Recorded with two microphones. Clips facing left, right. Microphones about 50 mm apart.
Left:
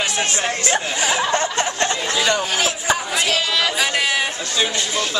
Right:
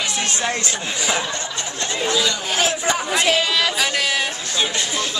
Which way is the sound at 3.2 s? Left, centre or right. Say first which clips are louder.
Right 1 dB; centre.